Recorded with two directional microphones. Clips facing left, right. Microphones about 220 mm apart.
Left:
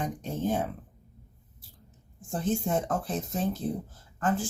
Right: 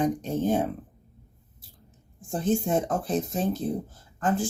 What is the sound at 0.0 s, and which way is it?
Speech, 20° right (ahead or behind).